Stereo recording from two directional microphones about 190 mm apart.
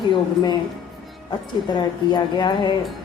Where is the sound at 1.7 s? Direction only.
25° left (ahead or behind).